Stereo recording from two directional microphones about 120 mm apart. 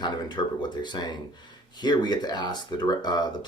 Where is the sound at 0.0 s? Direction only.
35° left (ahead or behind).